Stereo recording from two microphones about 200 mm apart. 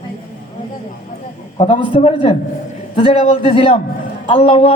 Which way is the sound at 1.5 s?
25° left (ahead or behind).